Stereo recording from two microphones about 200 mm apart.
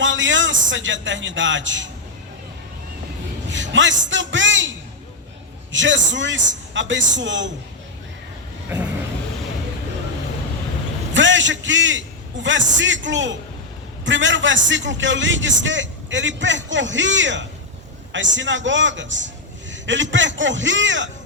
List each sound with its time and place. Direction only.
0.0 s speech: 70° right (ahead or behind)
3.5 s a sound: 65° right (ahead or behind)
4.1 s a man's voice: 70° right (ahead or behind)
5.7 s a man's voice: 65° right (ahead or behind)
11.1 s a man's voice: 70° right (ahead or behind)